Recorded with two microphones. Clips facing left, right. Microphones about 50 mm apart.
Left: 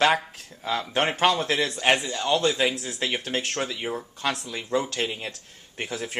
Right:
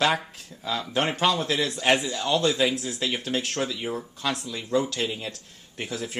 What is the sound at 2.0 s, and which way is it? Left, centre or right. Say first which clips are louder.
Speech: right 1 dB; centre.